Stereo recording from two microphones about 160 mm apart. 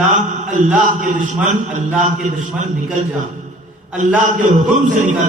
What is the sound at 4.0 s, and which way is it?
A man's voice, 50° right (ahead or behind).